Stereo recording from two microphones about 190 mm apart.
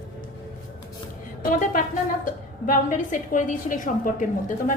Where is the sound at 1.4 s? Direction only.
45° left (ahead or behind).